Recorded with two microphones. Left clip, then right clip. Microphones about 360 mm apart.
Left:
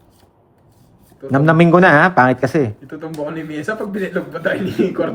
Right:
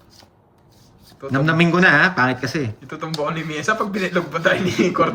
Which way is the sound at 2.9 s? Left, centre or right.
Centre.